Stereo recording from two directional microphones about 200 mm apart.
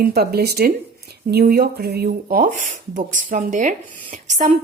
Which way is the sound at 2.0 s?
40° right (ahead or behind).